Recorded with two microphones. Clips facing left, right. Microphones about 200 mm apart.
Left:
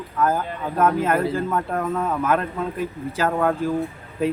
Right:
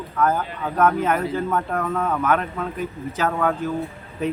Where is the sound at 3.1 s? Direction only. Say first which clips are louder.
Left 1 dB; 10° left (ahead or behind).